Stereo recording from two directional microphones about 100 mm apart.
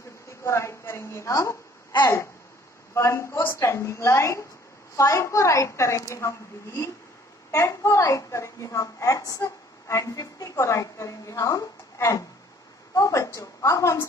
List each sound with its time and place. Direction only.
0.4 s a woman's voice: 30° left (ahead or behind)